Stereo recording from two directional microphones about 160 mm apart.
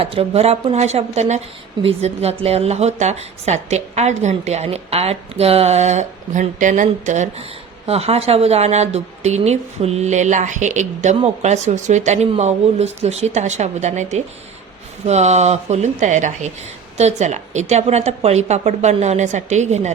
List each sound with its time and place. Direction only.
0.0 s speech: 35° right (ahead or behind)